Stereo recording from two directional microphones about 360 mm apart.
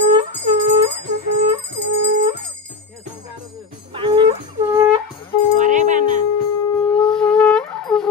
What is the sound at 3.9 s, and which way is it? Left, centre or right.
Speech, centre.